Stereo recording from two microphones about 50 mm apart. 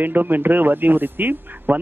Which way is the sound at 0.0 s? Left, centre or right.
Right.